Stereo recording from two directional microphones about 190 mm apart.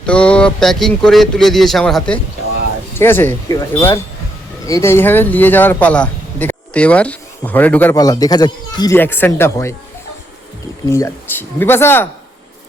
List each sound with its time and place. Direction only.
0.0 s a man's voice: 5° left (ahead or behind); by 9.0 s 20° left (ahead or behind)
9.0 s a man's voice: 10° left (ahead or behind)
10.8 s a man's voice: 15° left (ahead or behind)